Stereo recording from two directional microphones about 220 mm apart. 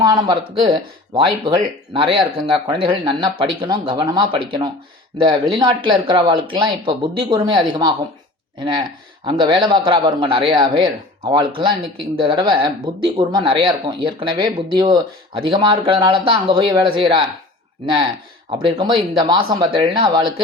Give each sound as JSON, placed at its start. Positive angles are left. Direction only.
{"t": 0.0, "sound": "speech", "side_deg": -20}